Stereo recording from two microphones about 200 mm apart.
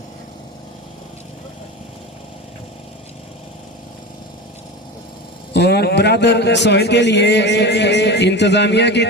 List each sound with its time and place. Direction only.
5.5 s a man's voice: 55° left (ahead or behind)